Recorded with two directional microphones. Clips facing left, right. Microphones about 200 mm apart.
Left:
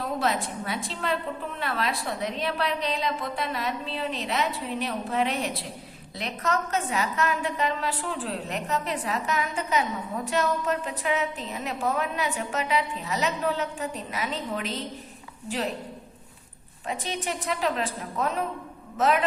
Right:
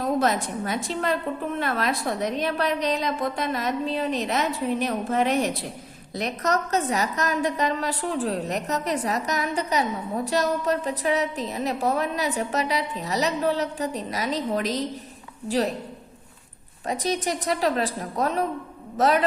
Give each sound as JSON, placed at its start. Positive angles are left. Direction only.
{"t": 0.0, "sound": "a woman's voice", "side_deg": -45}
{"t": 16.8, "sound": "a woman's voice", "side_deg": -40}